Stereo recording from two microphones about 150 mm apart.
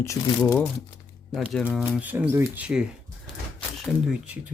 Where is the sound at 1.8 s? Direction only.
10° right (ahead or behind).